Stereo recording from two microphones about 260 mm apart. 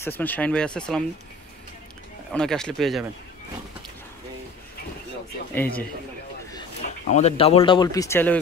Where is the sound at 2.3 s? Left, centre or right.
Centre.